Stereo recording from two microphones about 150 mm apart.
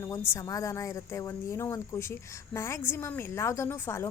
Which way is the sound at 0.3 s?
20° left (ahead or behind).